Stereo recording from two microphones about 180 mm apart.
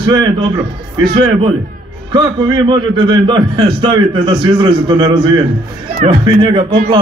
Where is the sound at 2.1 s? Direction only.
25° right (ahead or behind).